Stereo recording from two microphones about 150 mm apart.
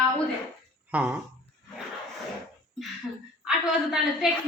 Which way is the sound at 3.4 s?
5° right (ahead or behind).